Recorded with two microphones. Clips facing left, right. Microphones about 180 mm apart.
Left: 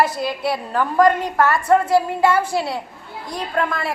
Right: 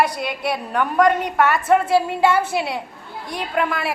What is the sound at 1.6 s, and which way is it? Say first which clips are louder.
A woman's voice: left 1 dB; 25° right (ahead or behind).